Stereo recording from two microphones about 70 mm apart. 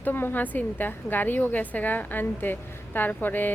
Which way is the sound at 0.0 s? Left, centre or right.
Left.